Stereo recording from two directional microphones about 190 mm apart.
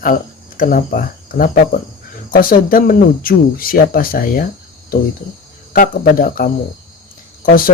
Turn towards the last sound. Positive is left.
turn(degrees=50)  # may be behind; listen again after turning